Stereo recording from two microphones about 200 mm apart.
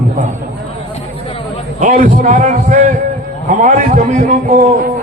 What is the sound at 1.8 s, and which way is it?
A man's voice, 40° right (ahead or behind).